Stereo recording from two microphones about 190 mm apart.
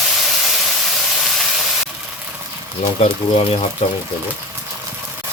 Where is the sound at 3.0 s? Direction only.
30° left (ahead or behind).